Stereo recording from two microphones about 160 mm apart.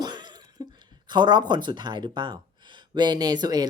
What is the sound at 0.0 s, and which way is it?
Speech, 25° right (ahead or behind).